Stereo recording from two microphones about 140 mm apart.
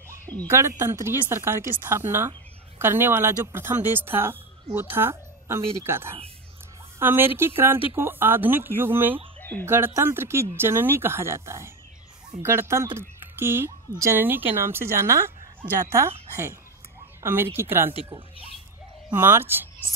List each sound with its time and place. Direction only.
0.5 s speech: 20° right (ahead or behind)
9.4 s a sound: 15° left (ahead or behind)
9.7 s speech: 15° right (ahead or behind)
17.2 s speech: 15° right (ahead or behind)
19.1 s speech: 15° right (ahead or behind)